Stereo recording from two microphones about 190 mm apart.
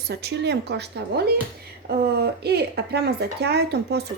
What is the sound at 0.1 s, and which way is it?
Speech, 60° right (ahead or behind).